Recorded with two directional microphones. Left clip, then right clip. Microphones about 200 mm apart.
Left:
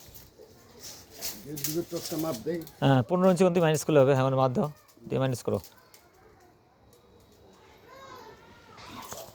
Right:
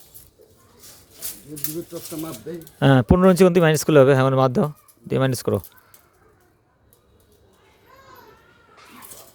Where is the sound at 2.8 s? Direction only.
50° right (ahead or behind).